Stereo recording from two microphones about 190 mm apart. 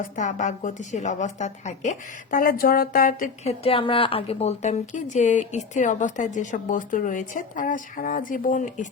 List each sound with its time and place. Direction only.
0.2 s speech: 40° left (ahead or behind)
3.6 s speech: 30° left (ahead or behind)